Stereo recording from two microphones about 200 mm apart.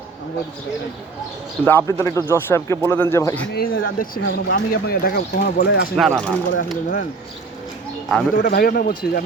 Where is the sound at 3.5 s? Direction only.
45° left (ahead or behind).